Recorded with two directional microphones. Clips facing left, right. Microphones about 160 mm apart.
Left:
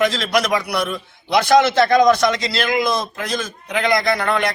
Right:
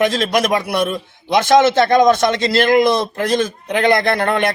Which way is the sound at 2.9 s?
30° right (ahead or behind).